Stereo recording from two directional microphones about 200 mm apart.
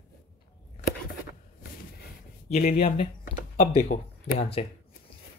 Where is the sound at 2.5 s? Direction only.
35° left (ahead or behind).